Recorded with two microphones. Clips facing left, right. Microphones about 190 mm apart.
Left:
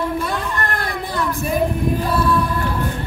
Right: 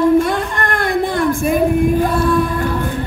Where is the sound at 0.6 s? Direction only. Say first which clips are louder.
Right 7 dB; 55° right (ahead or behind).